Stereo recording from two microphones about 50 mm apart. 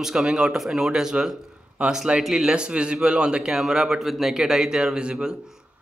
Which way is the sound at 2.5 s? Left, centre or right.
Right.